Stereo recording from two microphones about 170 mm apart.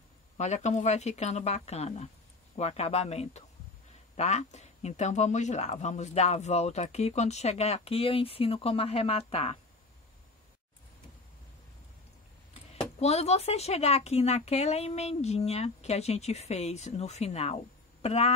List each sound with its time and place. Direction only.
0.4 s speech: 40° left (ahead or behind)
13.0 s speech: 40° left (ahead or behind)